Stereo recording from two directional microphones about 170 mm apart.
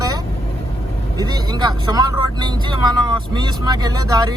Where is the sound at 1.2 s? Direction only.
25° right (ahead or behind).